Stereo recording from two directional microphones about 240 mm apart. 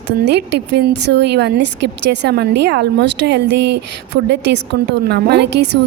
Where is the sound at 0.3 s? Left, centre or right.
Right.